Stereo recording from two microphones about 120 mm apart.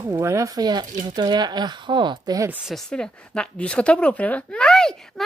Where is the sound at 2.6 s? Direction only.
5° left (ahead or behind).